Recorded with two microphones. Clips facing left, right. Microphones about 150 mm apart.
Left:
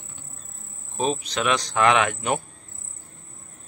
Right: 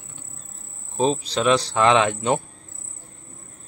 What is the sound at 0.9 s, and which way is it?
Speech, 30° right (ahead or behind).